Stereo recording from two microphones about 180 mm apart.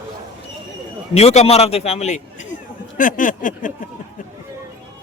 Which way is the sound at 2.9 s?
50° left (ahead or behind).